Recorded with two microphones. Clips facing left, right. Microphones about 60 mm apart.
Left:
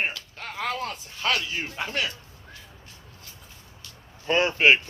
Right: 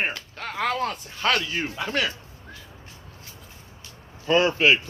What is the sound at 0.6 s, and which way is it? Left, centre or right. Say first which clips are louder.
Speech: right 4 dB; centre.